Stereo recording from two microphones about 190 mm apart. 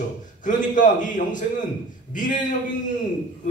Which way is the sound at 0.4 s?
40° left (ahead or behind).